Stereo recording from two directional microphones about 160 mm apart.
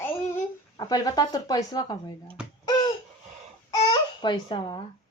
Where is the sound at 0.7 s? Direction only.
25° left (ahead or behind).